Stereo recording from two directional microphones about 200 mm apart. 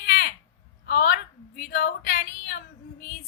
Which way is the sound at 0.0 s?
50° left (ahead or behind).